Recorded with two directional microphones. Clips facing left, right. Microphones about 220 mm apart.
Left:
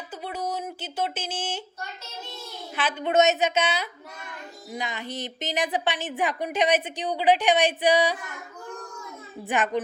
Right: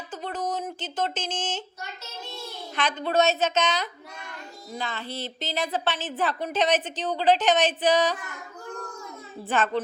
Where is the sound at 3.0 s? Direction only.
20° left (ahead or behind).